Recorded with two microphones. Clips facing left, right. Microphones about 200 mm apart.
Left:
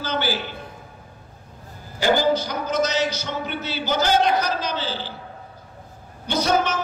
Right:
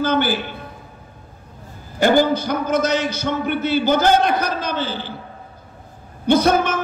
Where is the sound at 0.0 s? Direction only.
55° right (ahead or behind).